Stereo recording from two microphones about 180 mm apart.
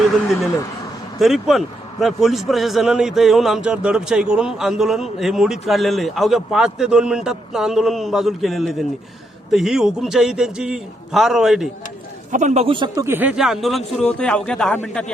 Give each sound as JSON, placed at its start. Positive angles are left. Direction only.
{"t": 1.2, "sound": "a man's voice", "side_deg": 0}
{"t": 12.3, "sound": "speech", "side_deg": -40}
{"t": 13.1, "sound": "a man's voice", "side_deg": -10}